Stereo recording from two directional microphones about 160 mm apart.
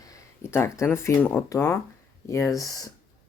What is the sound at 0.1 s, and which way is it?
Speech, 15° left (ahead or behind).